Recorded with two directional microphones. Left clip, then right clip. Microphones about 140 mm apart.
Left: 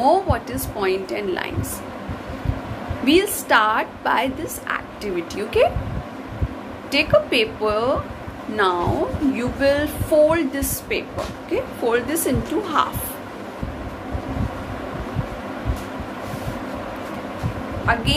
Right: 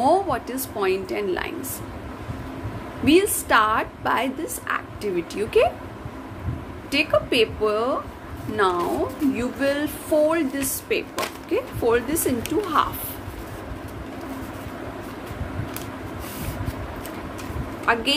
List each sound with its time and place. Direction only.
0.0 s a woman's voice: 20° right (ahead or behind)
3.1 s a woman's voice: 20° right (ahead or behind)
6.9 s a woman's voice: 20° right (ahead or behind)
17.9 s a woman's voice: 20° right (ahead or behind)